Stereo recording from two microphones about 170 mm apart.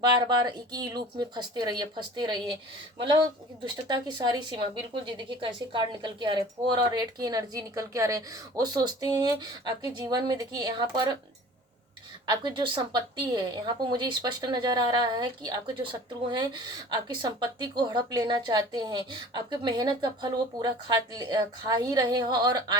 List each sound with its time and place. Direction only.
0.0 s a woman's voice: 25° right (ahead or behind)
3.8 s a woman's voice: 25° right (ahead or behind)
12.2 s a woman's voice: 25° right (ahead or behind)